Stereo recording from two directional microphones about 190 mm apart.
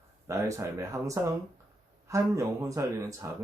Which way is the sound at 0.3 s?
15° right (ahead or behind).